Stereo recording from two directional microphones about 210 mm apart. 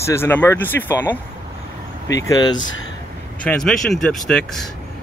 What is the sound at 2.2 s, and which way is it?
Speech, 20° left (ahead or behind).